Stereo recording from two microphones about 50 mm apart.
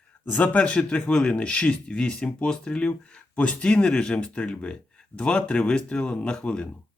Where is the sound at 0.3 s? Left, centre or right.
Left.